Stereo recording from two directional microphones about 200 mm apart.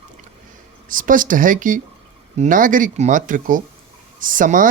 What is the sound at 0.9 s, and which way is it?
Speech, 45° right (ahead or behind).